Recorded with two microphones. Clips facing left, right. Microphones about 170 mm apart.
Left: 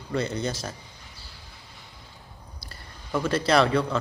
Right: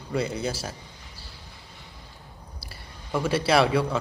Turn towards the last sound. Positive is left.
turn(degrees=-10)  # may be behind; listen again after turning